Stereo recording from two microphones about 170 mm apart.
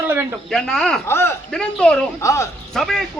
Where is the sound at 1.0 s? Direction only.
15° left (ahead or behind).